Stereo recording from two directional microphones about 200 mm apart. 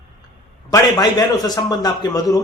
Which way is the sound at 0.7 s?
20° left (ahead or behind).